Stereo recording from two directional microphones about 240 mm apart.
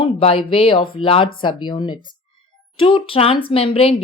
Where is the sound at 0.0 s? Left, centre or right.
Left.